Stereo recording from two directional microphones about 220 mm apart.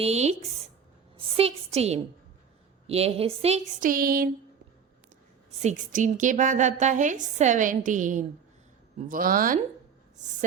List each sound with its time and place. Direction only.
0.0 s speech: 30° right (ahead or behind)
1.4 s a woman's voice: 30° right (ahead or behind)
5.5 s a woman's voice: 35° right (ahead or behind)